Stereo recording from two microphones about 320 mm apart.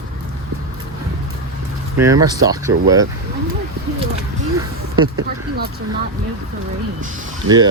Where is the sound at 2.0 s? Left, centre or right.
Centre.